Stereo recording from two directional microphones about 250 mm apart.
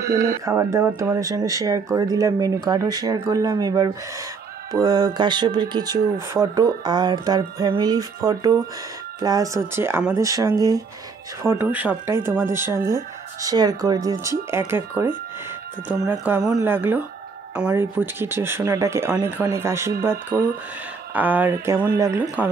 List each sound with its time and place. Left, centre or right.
0.0 s speech: centre